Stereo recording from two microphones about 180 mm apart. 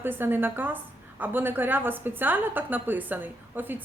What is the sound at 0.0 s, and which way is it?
A woman's voice, 10° right (ahead or behind).